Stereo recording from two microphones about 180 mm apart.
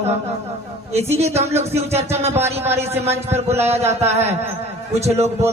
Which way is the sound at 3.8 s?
15° right (ahead or behind).